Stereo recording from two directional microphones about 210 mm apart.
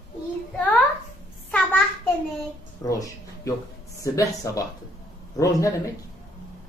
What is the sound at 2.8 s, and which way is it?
Speech, 15° left (ahead or behind).